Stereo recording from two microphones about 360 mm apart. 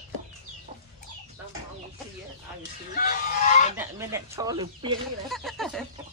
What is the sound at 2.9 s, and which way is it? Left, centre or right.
Fowl, left.